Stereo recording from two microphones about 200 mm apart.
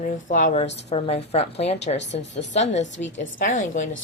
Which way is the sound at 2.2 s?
60° left (ahead or behind).